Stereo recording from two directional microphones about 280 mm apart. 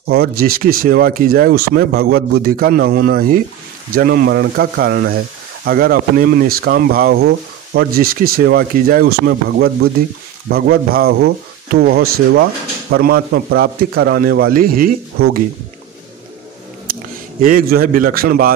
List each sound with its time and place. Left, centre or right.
0.1 s speech: right
17.4 s speech: right